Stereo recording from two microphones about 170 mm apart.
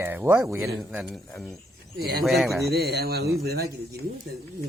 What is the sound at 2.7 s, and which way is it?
Speech, 70° right (ahead or behind).